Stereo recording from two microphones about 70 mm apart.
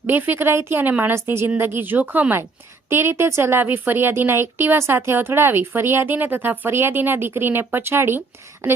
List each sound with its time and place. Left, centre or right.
0.1 s a woman's voice: right
2.9 s a woman's voice: right